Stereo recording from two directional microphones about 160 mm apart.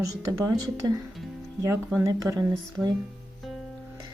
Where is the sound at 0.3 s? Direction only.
25° right (ahead or behind).